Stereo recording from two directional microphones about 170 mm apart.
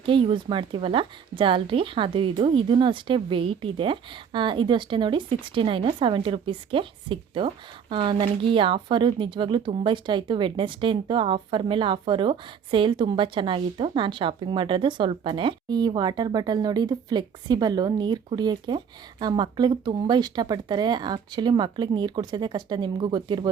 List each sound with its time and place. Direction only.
0.0 s a woman's voice: 30° right (ahead or behind)